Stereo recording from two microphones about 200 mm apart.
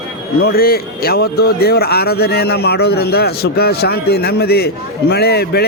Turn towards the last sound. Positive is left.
turn(degrees=50)  # may be behind; listen again after turning